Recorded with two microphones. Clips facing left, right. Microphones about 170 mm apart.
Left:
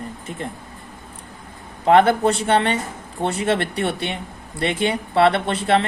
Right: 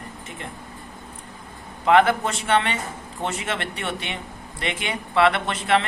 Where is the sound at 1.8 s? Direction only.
35° left (ahead or behind).